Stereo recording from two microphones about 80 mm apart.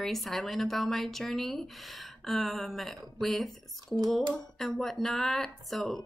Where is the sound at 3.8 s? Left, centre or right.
Right.